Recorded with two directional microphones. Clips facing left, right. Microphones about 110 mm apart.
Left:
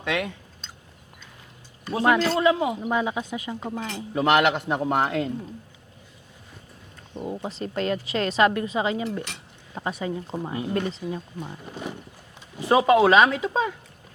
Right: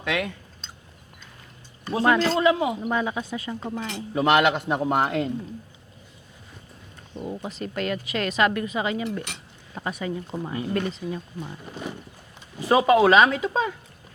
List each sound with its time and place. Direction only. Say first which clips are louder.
0.0 s speech: even; 5° left (ahead or behind)
1.9 s speech: even; 5° left (ahead or behind)
2.9 s speech: left 1 dB; 15° left (ahead or behind)
4.1 s a man's voice: even; 5° right (ahead or behind)
7.2 s speech: left 1 dB; 20° left (ahead or behind)
12.6 s speech: even; centre (ahead or behind)